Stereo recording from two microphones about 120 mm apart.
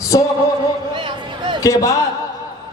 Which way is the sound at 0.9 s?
40° right (ahead or behind).